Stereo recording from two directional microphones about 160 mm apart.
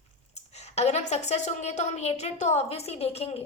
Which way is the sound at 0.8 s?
45° left (ahead or behind).